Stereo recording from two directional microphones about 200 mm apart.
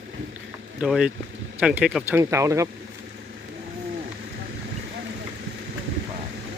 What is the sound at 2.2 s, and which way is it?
Speech, 15° right (ahead or behind).